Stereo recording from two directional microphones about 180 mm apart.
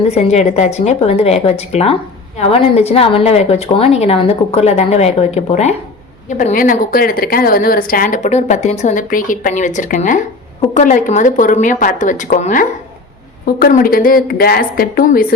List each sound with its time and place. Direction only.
0.1 s a woman's voice: 35° left (ahead or behind); by 15.3 s 55° left (ahead or behind)